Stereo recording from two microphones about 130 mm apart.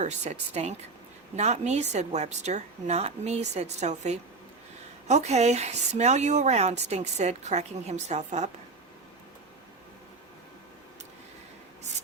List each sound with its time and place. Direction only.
0.0 s speech: 60° right (ahead or behind)